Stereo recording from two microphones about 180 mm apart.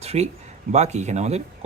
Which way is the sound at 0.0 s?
35° right (ahead or behind).